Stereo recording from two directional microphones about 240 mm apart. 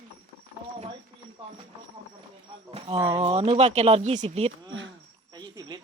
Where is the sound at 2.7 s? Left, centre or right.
Right.